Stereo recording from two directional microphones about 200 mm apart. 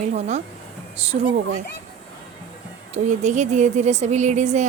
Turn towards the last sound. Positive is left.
turn(degrees=-35)  # may be behind; listen again after turning